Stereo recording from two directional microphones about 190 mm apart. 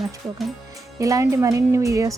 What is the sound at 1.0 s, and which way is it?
Speech, 15° right (ahead or behind).